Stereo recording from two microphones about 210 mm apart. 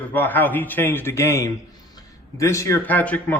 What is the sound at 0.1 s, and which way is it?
A man's voice, 10° left (ahead or behind).